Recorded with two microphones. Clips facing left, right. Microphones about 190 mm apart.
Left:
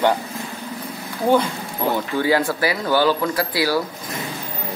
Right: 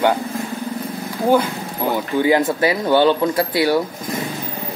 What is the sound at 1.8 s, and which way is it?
Speech, 15° right (ahead or behind).